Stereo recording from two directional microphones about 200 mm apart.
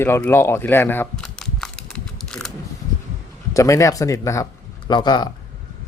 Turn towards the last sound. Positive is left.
turn(degrees=20)  # may be behind; listen again after turning